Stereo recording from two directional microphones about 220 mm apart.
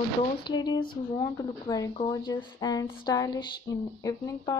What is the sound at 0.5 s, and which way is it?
Speech, 20° left (ahead or behind).